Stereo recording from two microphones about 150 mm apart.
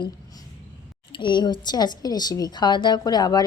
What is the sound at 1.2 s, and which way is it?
A woman's voice, 30° left (ahead or behind).